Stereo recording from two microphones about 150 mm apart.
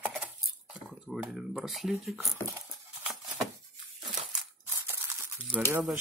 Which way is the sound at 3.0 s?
5° right (ahead or behind).